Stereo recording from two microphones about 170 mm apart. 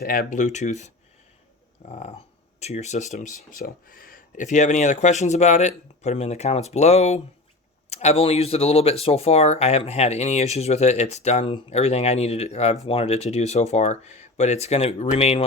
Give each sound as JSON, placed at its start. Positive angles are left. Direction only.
{"t": 0.0, "sound": "speech", "side_deg": 60}
{"t": 1.9, "sound": "speech", "side_deg": 45}